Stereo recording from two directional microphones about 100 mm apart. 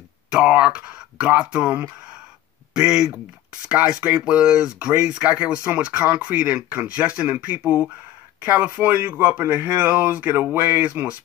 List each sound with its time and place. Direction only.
0.3 s speech: 10° right (ahead or behind)